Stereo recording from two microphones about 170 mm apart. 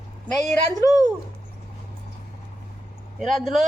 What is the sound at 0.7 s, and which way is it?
Speech, 20° left (ahead or behind).